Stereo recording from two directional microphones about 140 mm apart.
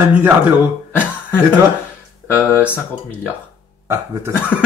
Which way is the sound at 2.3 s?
10° right (ahead or behind).